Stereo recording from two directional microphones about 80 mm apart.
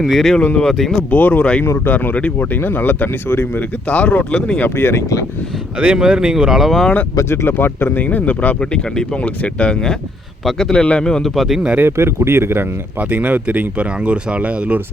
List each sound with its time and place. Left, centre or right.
0.0 s speech: centre
1.1 s speech: centre
1.6 s speech: left
1.9 s speech: centre
4.6 s speech: left
5.8 s speech: centre
7.2 s speech: left
8.0 s speech: centre
11.7 s speech: right
13.0 s speech: centre